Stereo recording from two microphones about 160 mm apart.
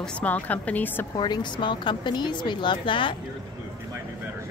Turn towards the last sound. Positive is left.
turn(degrees=30)  # may be behind; listen again after turning